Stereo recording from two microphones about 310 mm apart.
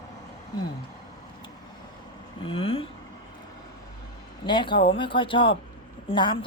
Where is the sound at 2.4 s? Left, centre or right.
Centre.